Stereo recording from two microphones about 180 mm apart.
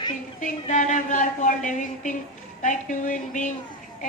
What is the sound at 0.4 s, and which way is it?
Speech, 45° left (ahead or behind).